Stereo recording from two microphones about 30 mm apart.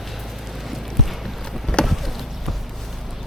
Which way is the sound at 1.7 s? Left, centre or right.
Left.